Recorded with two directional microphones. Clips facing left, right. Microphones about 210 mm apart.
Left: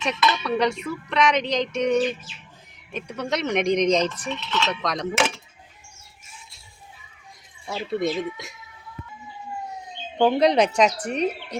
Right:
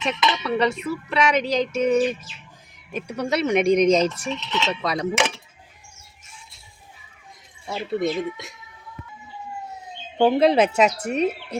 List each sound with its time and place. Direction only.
0.2 s speech: 15° right (ahead or behind)
0.4 s speech: centre (ahead or behind)
7.7 s speech: centre (ahead or behind)
10.2 s speech: 5° right (ahead or behind)